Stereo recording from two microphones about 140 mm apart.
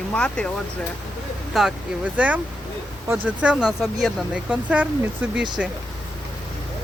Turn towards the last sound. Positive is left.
turn(degrees=-10)  # may be behind; listen again after turning